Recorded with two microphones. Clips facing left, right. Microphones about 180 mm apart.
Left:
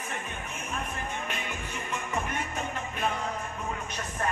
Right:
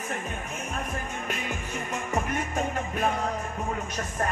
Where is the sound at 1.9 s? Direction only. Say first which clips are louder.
Right 4 dB; 35° right (ahead or behind).